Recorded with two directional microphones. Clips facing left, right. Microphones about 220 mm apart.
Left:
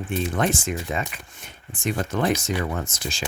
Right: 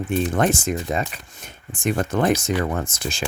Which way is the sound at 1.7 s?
50° right (ahead or behind).